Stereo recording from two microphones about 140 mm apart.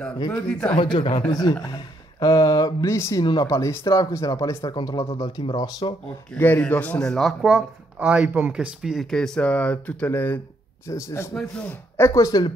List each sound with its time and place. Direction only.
0.3 s a man's voice: 5° left (ahead or behind)
0.7 s speech: 35° left (ahead or behind)
6.3 s a man's voice: 15° left (ahead or behind)
7.4 s speech: 10° right (ahead or behind); by 11.3 s 20° left (ahead or behind)
11.3 s speech: 5° left (ahead or behind)
11.7 s speech: 20° left (ahead or behind)